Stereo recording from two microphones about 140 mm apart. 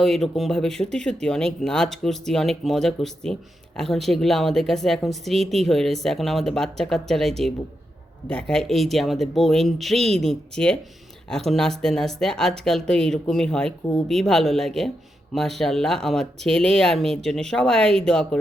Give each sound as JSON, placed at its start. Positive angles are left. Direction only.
{"t": 0.0, "sound": "speech", "side_deg": 0}